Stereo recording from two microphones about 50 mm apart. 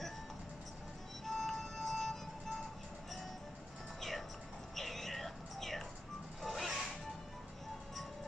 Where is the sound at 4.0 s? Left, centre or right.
Centre.